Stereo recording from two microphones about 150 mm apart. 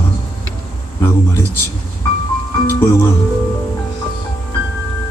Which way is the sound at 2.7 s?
15° left (ahead or behind).